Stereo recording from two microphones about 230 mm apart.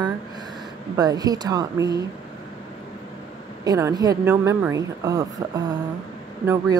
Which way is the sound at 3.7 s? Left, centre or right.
Centre.